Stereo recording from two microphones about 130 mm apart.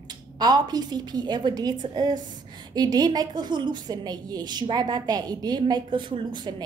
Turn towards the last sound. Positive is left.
turn(degrees=-35)  # may be behind; listen again after turning